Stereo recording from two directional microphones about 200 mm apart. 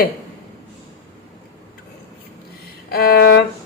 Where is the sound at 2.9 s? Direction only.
50° left (ahead or behind).